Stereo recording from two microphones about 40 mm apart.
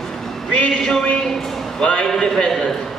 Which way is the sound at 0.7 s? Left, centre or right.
Centre.